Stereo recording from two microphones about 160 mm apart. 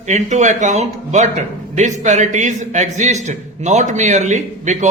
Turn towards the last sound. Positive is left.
turn(degrees=-50)  # may be behind; listen again after turning